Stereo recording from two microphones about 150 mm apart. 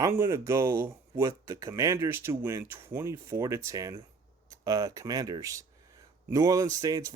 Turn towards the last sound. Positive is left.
turn(degrees=-20)  # may be behind; listen again after turning